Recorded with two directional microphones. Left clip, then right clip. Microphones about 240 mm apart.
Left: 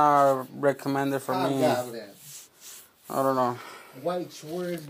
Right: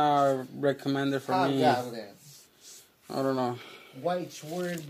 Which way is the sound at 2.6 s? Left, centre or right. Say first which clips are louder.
Left 4 dB; left.